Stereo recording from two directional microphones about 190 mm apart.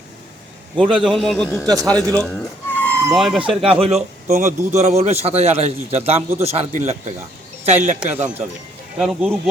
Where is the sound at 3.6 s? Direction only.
30° right (ahead or behind).